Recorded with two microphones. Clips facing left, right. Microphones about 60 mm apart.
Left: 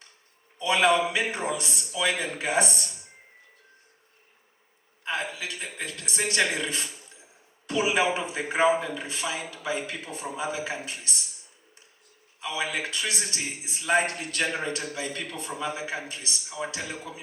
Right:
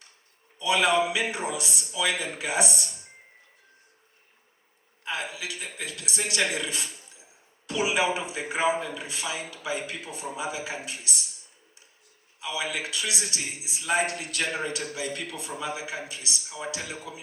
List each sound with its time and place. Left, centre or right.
0.6 s a man's voice: left
5.0 s a man's voice: left
12.4 s a man's voice: left